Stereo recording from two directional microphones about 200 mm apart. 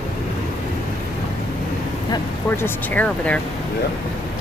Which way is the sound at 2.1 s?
10° left (ahead or behind).